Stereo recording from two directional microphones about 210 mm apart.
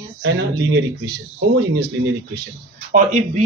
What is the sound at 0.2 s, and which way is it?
Speech, 55° right (ahead or behind).